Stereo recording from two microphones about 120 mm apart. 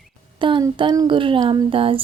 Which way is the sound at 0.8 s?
40° right (ahead or behind).